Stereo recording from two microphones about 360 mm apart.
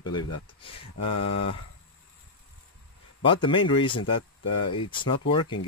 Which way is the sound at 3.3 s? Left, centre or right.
Centre.